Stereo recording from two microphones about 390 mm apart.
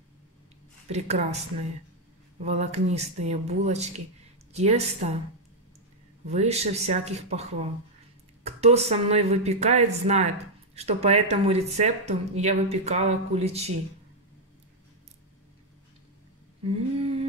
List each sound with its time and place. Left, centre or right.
0.8 s speech: centre
2.4 s speech: centre
6.2 s speech: centre
8.5 s speech: centre
16.6 s humming: centre